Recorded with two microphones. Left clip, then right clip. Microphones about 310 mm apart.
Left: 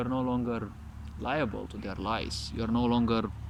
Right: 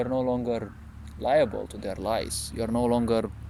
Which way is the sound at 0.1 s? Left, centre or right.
Right.